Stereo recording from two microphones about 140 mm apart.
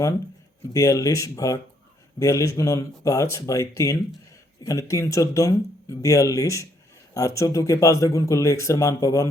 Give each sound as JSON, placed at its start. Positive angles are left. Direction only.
{"t": 0.7, "sound": "speech", "side_deg": 25}